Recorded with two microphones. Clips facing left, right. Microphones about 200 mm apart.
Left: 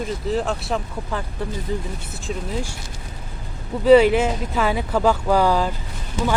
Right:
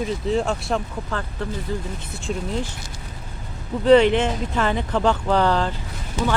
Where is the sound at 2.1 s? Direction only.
5° left (ahead or behind).